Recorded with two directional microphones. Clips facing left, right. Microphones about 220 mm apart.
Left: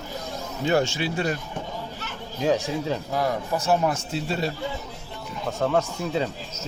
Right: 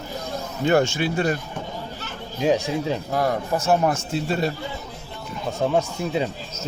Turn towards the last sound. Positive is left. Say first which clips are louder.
# right 2 dB
turn(degrees=-15)  # may be behind; listen again after turning